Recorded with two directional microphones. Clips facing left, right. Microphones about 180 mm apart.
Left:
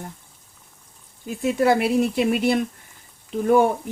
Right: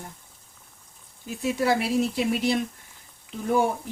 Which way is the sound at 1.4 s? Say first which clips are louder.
Left 5 dB; 55° left (ahead or behind).